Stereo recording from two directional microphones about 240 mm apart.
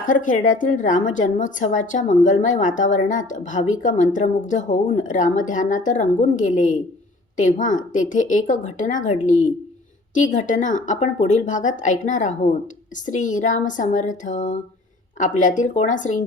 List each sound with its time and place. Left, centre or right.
0.0 s a woman's voice: left